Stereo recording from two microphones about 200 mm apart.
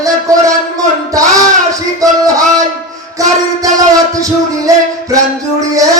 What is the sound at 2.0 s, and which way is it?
Music, 15° right (ahead or behind).